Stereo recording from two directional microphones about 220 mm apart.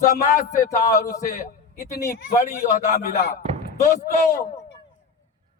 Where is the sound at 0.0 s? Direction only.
35° left (ahead or behind).